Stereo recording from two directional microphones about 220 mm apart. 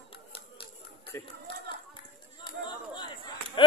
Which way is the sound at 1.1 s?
10° left (ahead or behind).